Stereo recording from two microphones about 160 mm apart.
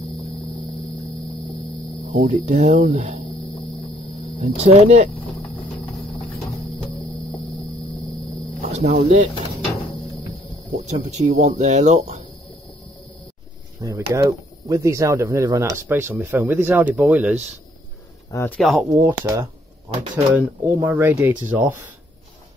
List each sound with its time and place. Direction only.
2.0 s speech: 45° right (ahead or behind)
8.6 s speech: 40° right (ahead or behind)
10.7 s speech: 45° right (ahead or behind)
13.7 s speech: 20° right (ahead or behind)
18.3 s speech: 15° left (ahead or behind)
18.6 s speech: centre (ahead or behind)
18.9 s speech: 15° right (ahead or behind)